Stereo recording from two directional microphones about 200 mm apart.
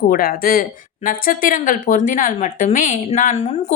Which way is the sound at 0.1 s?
45° left (ahead or behind).